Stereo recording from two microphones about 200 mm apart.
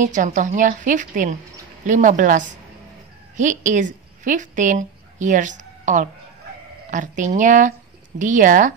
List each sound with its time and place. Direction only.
0.0 s a woman's voice: 40° right (ahead or behind)